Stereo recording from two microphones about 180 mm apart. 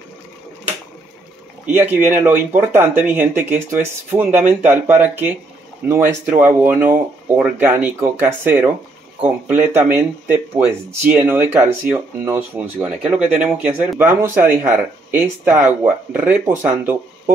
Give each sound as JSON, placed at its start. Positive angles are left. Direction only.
{"t": 1.7, "sound": "speech", "side_deg": -10}
{"t": 9.9, "sound": "speech", "side_deg": -10}